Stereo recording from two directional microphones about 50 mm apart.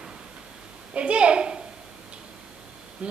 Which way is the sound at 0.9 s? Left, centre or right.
Right.